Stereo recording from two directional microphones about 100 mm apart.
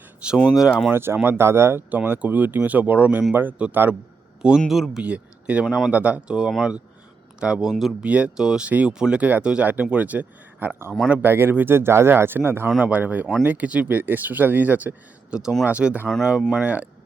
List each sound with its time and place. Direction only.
0.3 s speech: 5° right (ahead or behind)
0.9 s speech: 25° right (ahead or behind)
4.7 s speech: centre (ahead or behind)
5.0 s speech: 15° right (ahead or behind)
5.6 s speech: centre (ahead or behind)
5.9 s speech: 15° right (ahead or behind)
8.0 s speech: 10° right (ahead or behind)